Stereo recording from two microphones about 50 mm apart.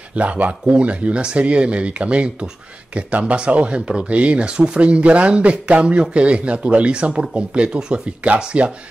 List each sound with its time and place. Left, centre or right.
0.1 s speech: right